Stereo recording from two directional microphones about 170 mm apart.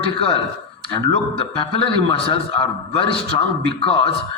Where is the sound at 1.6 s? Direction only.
30° left (ahead or behind).